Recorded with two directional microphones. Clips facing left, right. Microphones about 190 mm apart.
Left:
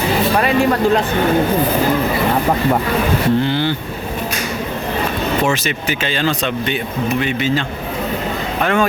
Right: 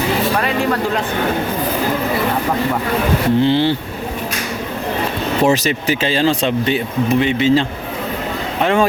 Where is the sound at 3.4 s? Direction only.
25° right (ahead or behind).